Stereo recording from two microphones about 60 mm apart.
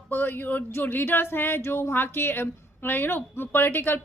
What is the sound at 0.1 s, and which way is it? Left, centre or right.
A woman's voice, left.